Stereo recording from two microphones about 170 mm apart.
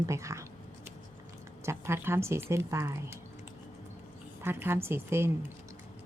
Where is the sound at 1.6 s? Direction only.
15° right (ahead or behind).